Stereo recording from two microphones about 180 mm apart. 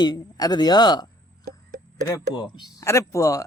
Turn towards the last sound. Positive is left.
turn(degrees=15)  # may be behind; listen again after turning